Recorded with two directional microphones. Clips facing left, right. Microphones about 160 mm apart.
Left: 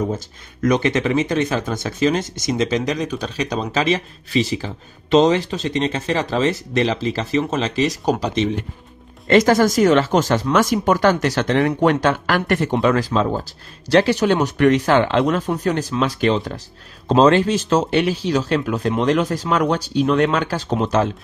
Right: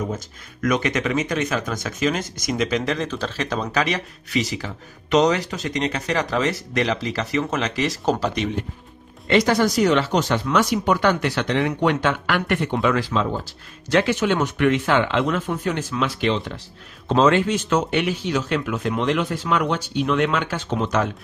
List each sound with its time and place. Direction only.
0.1 s speech: 30° left (ahead or behind)
9.3 s speech: 45° left (ahead or behind); by 21.1 s 30° left (ahead or behind)